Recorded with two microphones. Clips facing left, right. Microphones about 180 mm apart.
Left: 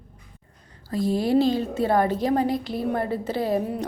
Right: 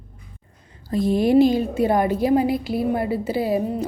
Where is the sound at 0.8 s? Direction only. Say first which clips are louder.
Right 4 dB; 20° right (ahead or behind).